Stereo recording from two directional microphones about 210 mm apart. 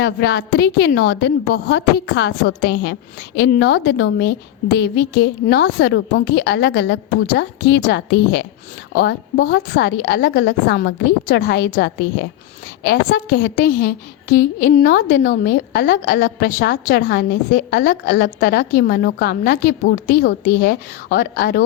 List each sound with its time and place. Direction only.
0.0 s a woman's voice: 50° left (ahead or behind)